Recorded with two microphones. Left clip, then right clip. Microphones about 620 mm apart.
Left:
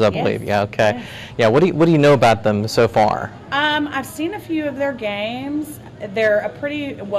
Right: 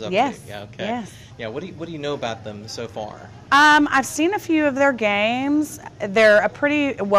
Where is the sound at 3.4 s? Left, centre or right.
Right.